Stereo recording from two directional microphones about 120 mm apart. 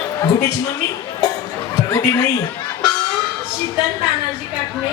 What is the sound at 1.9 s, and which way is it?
Speech, 30° left (ahead or behind).